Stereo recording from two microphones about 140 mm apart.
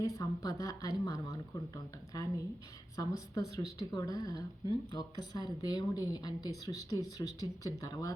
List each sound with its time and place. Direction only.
0.0 s speech: 25° left (ahead or behind)